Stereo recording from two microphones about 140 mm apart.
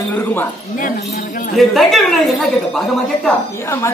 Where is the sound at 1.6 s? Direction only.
Centre (ahead or behind).